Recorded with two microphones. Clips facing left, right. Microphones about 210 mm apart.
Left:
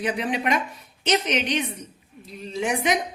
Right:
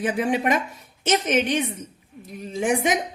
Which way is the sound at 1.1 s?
45° right (ahead or behind).